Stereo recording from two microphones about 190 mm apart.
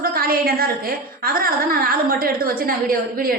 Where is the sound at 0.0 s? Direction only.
50° right (ahead or behind).